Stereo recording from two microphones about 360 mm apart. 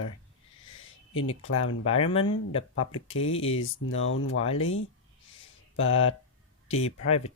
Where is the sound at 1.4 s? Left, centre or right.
Left.